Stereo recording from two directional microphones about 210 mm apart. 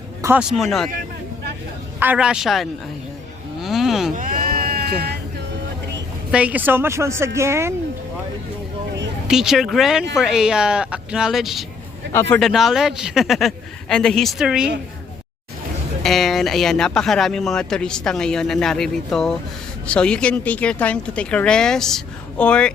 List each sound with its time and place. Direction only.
0.2 s music: 10° right (ahead or behind)
0.5 s speech: centre (ahead or behind)
2.0 s speech: 5° right (ahead or behind)
3.6 s a sound: centre (ahead or behind)
4.1 s sheep: 40° right (ahead or behind)
6.3 s speech: 5° right (ahead or behind)
9.2 s speech: centre (ahead or behind)
12.1 s speech: 10° left (ahead or behind)
16.0 s speech: centre (ahead or behind)